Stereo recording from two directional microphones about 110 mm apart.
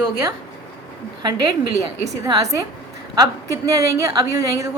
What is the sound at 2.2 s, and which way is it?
A woman's voice, 30° right (ahead or behind).